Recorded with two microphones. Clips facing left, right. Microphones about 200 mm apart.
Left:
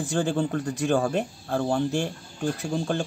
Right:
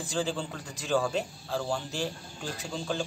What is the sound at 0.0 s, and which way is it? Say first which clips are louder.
Speech: left 6 dB; 55° left (ahead or behind).